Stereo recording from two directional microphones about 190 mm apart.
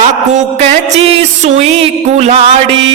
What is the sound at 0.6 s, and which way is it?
Music, 30° right (ahead or behind).